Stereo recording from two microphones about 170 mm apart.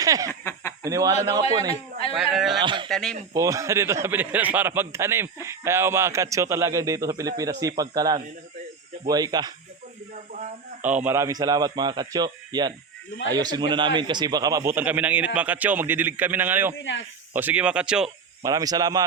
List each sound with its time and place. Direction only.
0.0 s speech: 20° right (ahead or behind)
0.3 s speech: 15° left (ahead or behind)
0.8 s a man's voice: 20° right (ahead or behind)
2.1 s speech: centre (ahead or behind)
2.6 s a man's voice: 30° right (ahead or behind)
2.9 s speech: 5° left (ahead or behind)
3.3 s a man's voice: 20° right (ahead or behind)
10.8 s a man's voice: 10° right (ahead or behind)
16.7 s speech: 90° left
17.3 s a man's voice: 10° right (ahead or behind)
18.4 s a man's voice: 20° right (ahead or behind)